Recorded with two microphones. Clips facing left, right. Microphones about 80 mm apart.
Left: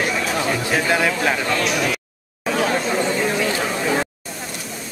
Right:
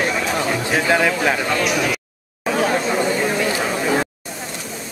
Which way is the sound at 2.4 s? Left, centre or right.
Centre.